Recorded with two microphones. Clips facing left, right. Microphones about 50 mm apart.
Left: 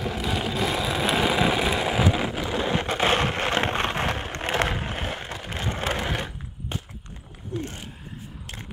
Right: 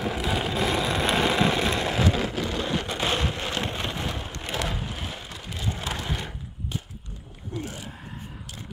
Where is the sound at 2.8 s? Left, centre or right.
Left.